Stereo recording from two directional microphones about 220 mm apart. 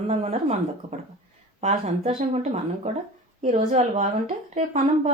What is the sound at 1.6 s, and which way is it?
A woman's voice, 30° right (ahead or behind).